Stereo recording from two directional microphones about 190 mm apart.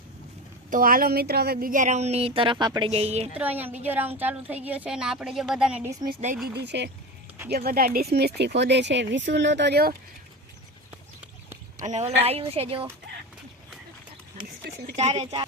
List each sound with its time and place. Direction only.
0.7 s speech: 45° right (ahead or behind)
3.3 s a woman's voice: 10° right (ahead or behind)
6.0 s speech: 20° right (ahead or behind)
6.7 s speech: 65° right (ahead or behind)
7.5 s speech: 55° right (ahead or behind)
11.9 s speech: 35° right (ahead or behind)
14.9 s speech: 35° right (ahead or behind)